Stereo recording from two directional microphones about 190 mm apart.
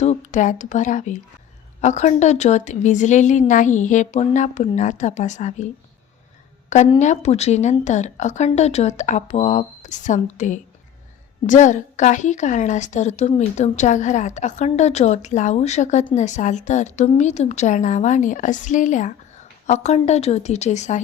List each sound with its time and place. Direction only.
0.0 s a woman's voice: 40° left (ahead or behind)
7.0 s a woman's voice: 35° left (ahead or behind)